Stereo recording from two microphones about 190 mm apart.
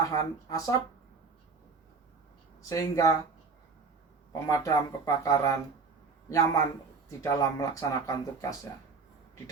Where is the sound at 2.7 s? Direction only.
15° left (ahead or behind).